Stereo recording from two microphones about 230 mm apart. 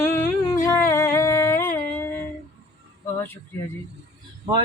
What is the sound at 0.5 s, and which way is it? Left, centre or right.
Music, centre.